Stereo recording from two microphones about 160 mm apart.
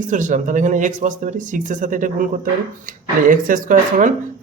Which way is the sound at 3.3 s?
55° right (ahead or behind).